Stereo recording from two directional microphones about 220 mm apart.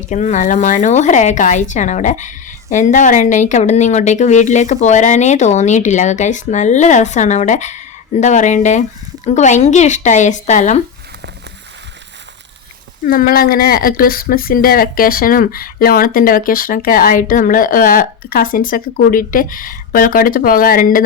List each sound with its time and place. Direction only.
0.1 s speech: 35° left (ahead or behind)
13.1 s speech: 40° left (ahead or behind)